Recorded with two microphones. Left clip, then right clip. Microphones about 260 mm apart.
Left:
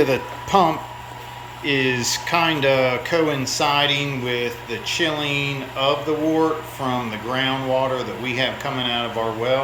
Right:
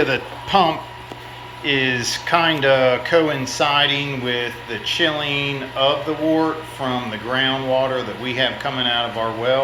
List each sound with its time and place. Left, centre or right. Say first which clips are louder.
0.0 s a man's voice: even; centre